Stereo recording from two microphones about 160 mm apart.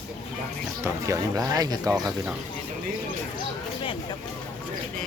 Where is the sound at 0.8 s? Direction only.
20° right (ahead or behind).